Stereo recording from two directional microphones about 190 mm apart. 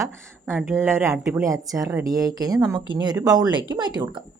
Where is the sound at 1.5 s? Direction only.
15° right (ahead or behind).